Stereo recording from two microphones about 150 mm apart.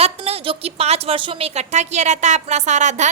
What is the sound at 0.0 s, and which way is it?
A woman's voice, 40° right (ahead or behind).